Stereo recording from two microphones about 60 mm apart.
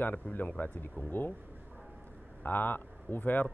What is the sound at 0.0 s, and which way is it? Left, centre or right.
Speech, left.